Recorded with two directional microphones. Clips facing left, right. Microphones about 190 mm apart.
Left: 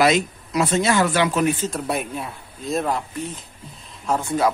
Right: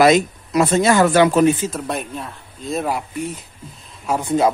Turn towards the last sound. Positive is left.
turn(degrees=-20)  # may be behind; listen again after turning